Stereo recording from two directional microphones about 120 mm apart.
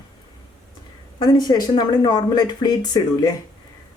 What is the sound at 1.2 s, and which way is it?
Speech, 35° left (ahead or behind).